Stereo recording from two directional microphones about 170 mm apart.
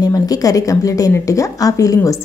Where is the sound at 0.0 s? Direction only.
20° left (ahead or behind).